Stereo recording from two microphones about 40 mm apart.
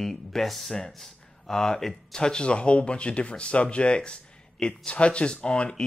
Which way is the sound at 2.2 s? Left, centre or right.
Left.